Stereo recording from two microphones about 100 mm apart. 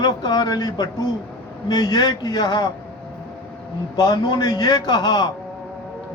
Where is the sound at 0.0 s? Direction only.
45° left (ahead or behind).